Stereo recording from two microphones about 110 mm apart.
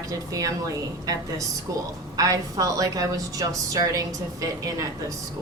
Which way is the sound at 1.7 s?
30° right (ahead or behind).